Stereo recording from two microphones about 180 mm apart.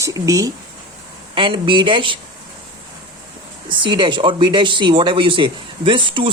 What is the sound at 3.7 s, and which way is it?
Speech, 25° right (ahead or behind).